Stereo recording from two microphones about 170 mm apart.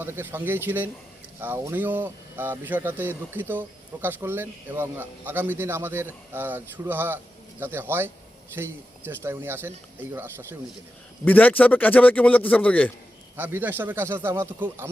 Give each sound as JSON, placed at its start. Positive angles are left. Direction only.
{"t": 0.0, "sound": "speech", "side_deg": -10}
{"t": 11.3, "sound": "a man's voice", "side_deg": 10}
{"t": 13.3, "sound": "speech", "side_deg": -10}